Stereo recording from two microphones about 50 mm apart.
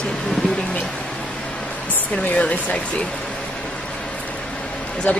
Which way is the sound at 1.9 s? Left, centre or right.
Left.